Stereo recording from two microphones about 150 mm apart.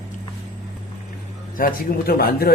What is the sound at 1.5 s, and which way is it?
Speech, 75° left (ahead or behind).